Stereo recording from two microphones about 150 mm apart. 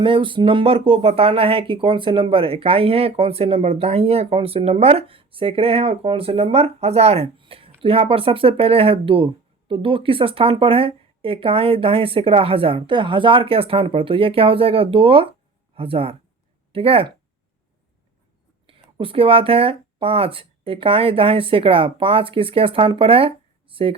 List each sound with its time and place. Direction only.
0.0 s speech: 35° right (ahead or behind)
18.9 s speech: 35° right (ahead or behind)